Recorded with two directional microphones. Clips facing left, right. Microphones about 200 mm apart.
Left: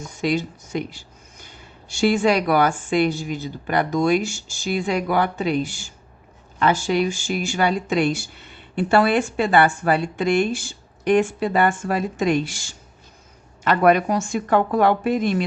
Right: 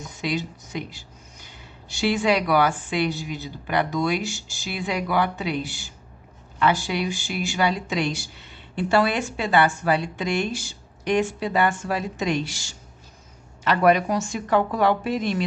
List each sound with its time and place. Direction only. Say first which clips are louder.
0.0 s speech: left 5 dB; 50° left (ahead or behind)